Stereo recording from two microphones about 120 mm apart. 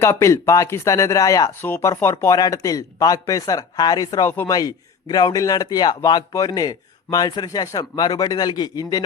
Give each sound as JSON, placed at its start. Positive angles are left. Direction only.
{"t": 0.0, "sound": "a man's voice", "side_deg": 25}